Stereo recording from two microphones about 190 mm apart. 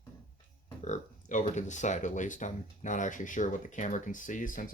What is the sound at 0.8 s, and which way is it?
Speech, 40° left (ahead or behind).